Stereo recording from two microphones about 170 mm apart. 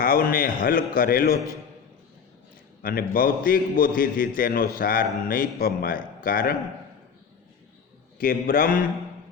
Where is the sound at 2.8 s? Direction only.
55° left (ahead or behind).